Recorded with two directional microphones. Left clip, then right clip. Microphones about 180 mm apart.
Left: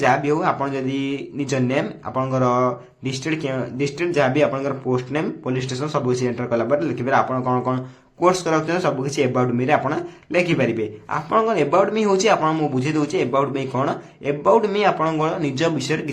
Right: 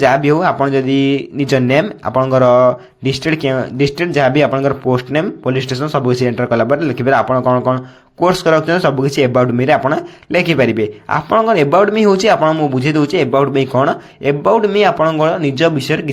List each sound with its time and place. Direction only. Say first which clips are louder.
0.1 s speech: right 6 dB; 30° right (ahead or behind)